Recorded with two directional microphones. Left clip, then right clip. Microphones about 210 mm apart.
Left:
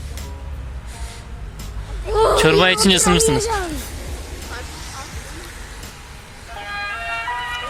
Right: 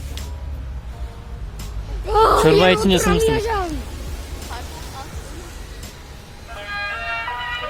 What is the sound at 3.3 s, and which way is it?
Speech, 20° left (ahead or behind).